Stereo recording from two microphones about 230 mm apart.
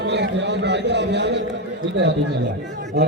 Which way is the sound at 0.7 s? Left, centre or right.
Right.